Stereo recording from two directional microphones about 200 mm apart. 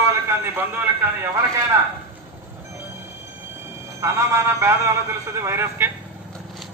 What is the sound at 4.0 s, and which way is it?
A man's voice, 15° right (ahead or behind).